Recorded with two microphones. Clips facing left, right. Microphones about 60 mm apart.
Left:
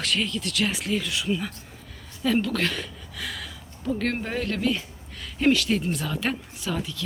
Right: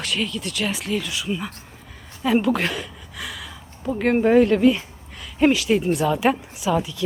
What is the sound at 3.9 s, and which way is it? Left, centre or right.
Speech, centre.